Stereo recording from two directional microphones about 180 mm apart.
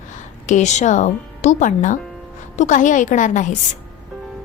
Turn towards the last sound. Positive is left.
turn(degrees=45)  # may be behind; listen again after turning